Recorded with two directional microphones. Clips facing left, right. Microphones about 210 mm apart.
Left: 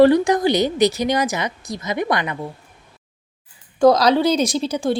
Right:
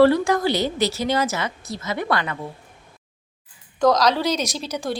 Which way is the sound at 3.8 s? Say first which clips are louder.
Left 4 dB; 30° left (ahead or behind).